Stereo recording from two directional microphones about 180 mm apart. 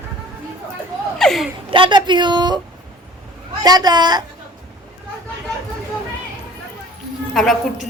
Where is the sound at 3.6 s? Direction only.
20° right (ahead or behind).